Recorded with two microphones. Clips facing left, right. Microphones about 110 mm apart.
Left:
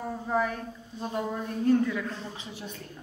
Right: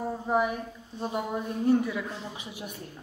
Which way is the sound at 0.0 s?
15° right (ahead or behind).